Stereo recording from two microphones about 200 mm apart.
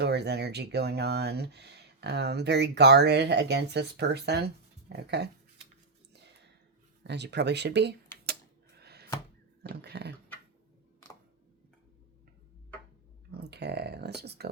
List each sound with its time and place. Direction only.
0.0 s speech: 55° right (ahead or behind)
7.0 s speech: 60° right (ahead or behind)
8.8 s a sound: 55° right (ahead or behind)
9.6 s speech: 55° right (ahead or behind)
13.3 s speech: 55° right (ahead or behind)